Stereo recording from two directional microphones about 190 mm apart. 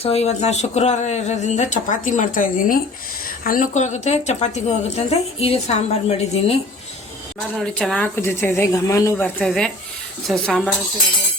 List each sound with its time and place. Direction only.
0.0 s speech: 35° left (ahead or behind)
7.5 s speech: 5° left (ahead or behind)